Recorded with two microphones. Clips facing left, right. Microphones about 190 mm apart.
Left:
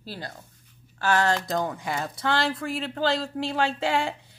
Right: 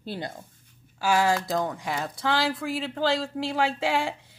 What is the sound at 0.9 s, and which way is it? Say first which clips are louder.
Speech: right 1 dB; 10° right (ahead or behind).